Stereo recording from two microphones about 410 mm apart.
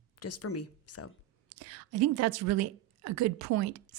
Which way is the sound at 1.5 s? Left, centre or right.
Right.